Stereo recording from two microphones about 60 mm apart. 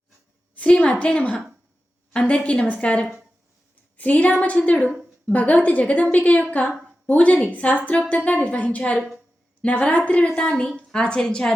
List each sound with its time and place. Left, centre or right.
0.5 s a woman's voice: centre